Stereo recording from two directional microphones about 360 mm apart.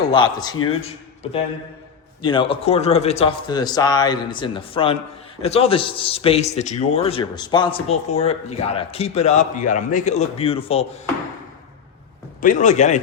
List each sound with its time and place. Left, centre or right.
0.1 s a man's voice: centre
12.4 s a man's voice: left